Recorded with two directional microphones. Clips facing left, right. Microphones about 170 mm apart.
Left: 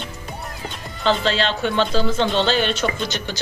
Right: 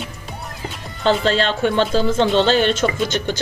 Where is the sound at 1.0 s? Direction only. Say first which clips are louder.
Right 3 dB; 45° right (ahead or behind).